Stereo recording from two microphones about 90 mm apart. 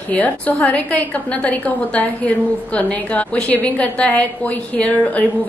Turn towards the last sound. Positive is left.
turn(degrees=15)  # may be behind; listen again after turning